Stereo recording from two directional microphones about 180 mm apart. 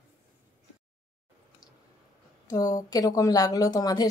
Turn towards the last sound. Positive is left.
turn(degrees=20)  # may be behind; listen again after turning